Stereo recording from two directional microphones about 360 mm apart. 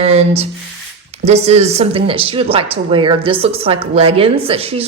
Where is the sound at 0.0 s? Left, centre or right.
Centre.